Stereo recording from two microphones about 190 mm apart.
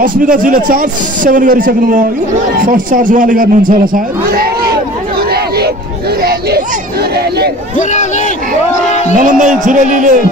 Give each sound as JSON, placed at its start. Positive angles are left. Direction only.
{"t": 0.0, "sound": "a man's voice", "side_deg": -45}
{"t": 7.2, "sound": "speech", "side_deg": -55}
{"t": 7.7, "sound": "speech", "side_deg": 40}
{"t": 9.1, "sound": "music", "side_deg": -40}